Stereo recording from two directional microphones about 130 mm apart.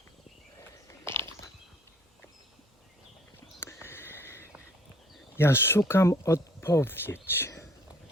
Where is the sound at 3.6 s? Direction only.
20° left (ahead or behind).